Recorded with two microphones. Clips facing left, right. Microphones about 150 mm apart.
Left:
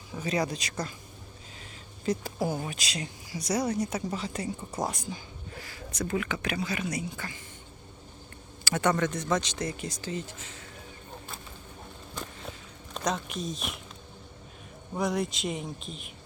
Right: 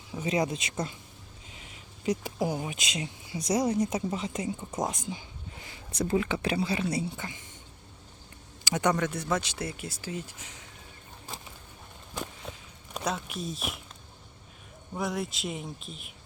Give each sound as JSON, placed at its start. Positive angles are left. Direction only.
{"t": 0.2, "sound": "speech", "side_deg": -25}
{"t": 8.6, "sound": "speech", "side_deg": -15}
{"t": 12.9, "sound": "speech", "side_deg": -5}
{"t": 14.9, "sound": "speech", "side_deg": 0}